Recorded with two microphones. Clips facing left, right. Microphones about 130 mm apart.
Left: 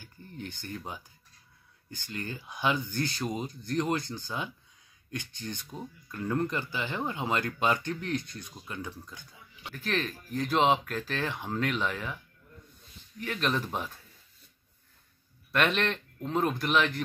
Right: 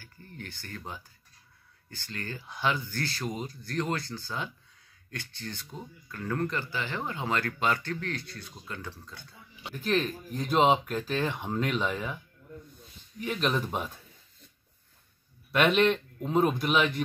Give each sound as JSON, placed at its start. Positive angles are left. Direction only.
{"t": 0.0, "sound": "a sound", "side_deg": 20}
{"t": 1.9, "sound": "speech", "side_deg": 15}
{"t": 9.8, "sound": "speech", "side_deg": 0}
{"t": 13.2, "sound": "speech", "side_deg": -5}
{"t": 15.5, "sound": "speech", "side_deg": -10}